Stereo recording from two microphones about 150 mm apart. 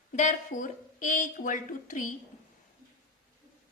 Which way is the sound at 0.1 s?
55° left (ahead or behind).